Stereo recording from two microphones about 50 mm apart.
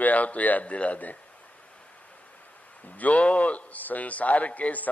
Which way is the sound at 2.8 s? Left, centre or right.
Left.